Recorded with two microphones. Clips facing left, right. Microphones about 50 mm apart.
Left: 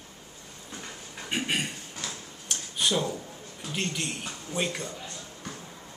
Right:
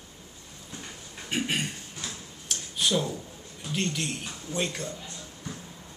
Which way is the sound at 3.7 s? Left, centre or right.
Centre.